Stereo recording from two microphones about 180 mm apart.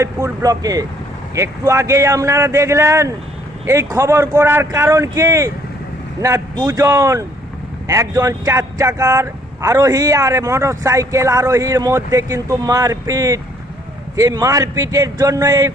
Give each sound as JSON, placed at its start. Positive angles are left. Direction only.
{"t": 0.0, "sound": "speech", "side_deg": -20}